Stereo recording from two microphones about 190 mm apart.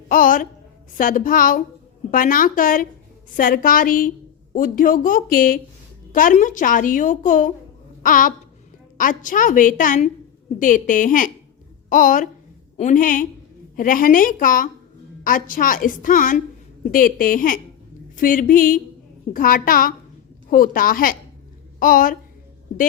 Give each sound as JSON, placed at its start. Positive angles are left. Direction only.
{"t": 0.1, "sound": "a woman's voice", "side_deg": 45}
{"t": 8.0, "sound": "a sound", "side_deg": 45}
{"t": 9.0, "sound": "a woman's voice", "side_deg": 45}